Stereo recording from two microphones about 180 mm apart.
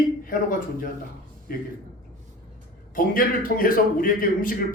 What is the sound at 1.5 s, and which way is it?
Speech, 55° left (ahead or behind).